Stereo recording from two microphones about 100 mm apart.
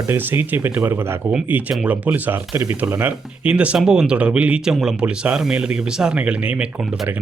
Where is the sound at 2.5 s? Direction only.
30° right (ahead or behind); by 6.7 s 10° right (ahead or behind).